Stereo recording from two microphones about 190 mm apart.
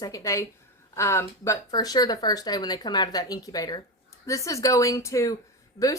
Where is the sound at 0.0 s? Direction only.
20° left (ahead or behind).